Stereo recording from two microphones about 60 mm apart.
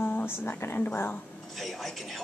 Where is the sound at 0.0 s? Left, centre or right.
Left.